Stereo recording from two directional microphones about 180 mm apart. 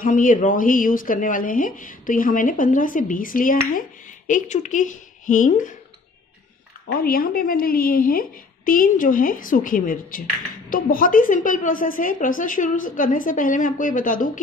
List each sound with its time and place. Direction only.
0.0 s speech: 50° left (ahead or behind)
7.0 s speech: 55° left (ahead or behind)